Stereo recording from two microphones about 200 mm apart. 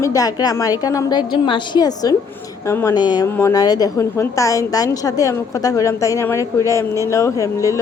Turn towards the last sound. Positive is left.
turn(degrees=15)  # may be behind; listen again after turning